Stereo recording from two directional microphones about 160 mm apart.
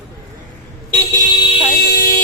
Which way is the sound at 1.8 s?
80° left.